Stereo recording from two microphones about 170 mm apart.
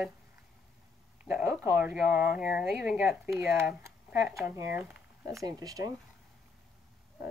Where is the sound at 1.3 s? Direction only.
5° right (ahead or behind).